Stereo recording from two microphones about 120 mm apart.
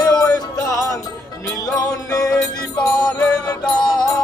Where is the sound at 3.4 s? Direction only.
35° left (ahead or behind).